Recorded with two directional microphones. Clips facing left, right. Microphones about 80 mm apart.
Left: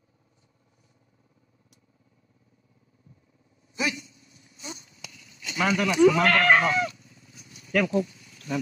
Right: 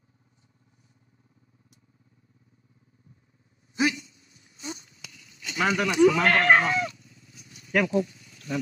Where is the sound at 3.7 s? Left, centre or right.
Right.